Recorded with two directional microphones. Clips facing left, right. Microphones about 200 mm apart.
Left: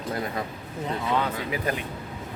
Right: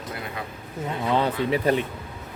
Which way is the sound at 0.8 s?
Centre (ahead or behind).